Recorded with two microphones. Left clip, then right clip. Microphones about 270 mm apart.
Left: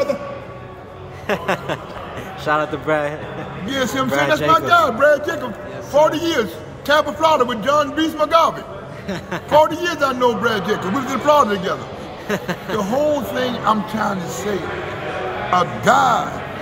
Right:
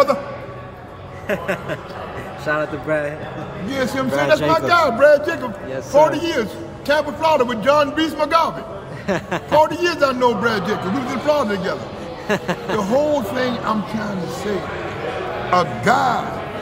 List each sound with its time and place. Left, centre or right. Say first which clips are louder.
1.2 s a man's voice: left 2 dB; centre
15.5 s a man's voice: left 1 dB; centre